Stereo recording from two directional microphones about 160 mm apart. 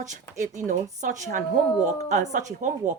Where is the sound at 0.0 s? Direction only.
50° right (ahead or behind).